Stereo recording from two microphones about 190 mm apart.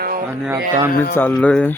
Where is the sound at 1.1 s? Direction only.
10° left (ahead or behind).